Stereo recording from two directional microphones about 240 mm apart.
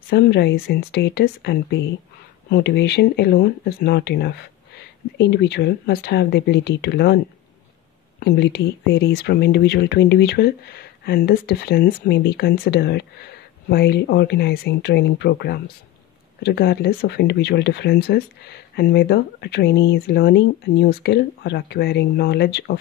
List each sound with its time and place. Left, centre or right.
0.1 s speech: left
8.2 s speech: left